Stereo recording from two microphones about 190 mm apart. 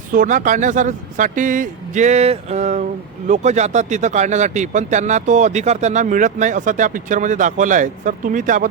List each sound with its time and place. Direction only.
0.1 s speech: 45° right (ahead or behind)